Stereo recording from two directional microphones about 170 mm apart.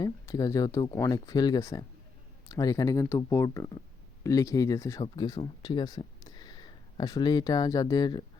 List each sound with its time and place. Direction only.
0.0 s speech: 20° left (ahead or behind)